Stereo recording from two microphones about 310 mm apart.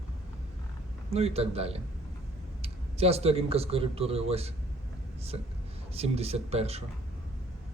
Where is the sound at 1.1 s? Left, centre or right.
Centre.